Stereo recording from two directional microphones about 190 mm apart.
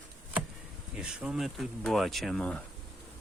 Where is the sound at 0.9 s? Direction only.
5° right (ahead or behind).